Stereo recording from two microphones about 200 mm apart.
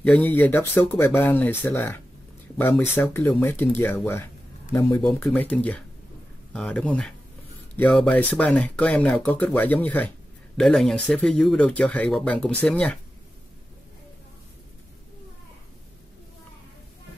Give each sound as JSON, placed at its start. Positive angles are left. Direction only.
{"t": 0.0, "sound": "speech", "side_deg": 5}